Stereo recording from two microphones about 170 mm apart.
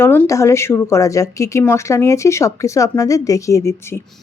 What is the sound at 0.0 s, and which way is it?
Speech, 15° left (ahead or behind).